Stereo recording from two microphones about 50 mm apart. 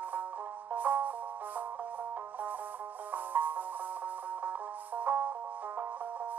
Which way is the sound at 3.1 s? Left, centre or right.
Right.